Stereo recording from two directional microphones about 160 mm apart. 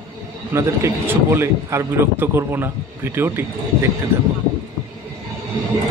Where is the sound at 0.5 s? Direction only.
15° right (ahead or behind).